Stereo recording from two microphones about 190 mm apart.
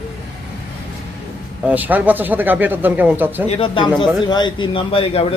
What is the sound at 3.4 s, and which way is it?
A man's voice, 30° left (ahead or behind).